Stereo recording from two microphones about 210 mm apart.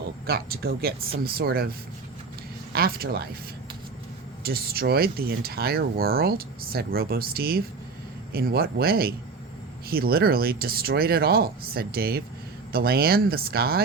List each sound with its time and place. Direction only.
0.3 s speech: 45° right (ahead or behind)
2.7 s speech: 45° right (ahead or behind)
4.4 s speech: 45° right (ahead or behind)